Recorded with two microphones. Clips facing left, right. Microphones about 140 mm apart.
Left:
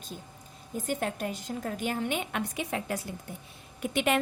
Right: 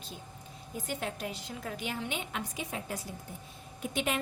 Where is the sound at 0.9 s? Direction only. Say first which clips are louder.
Left 5 dB; 50° left (ahead or behind).